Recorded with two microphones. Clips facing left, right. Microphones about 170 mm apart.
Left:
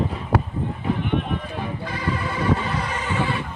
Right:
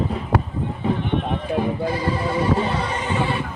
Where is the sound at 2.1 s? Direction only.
30° right (ahead or behind).